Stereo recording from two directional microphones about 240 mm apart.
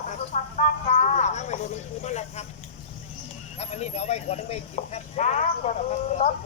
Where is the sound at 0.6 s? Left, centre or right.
Left.